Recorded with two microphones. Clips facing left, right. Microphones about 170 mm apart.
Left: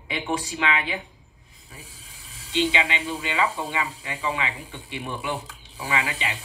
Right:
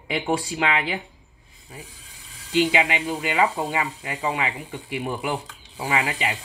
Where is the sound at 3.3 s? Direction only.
30° right (ahead or behind).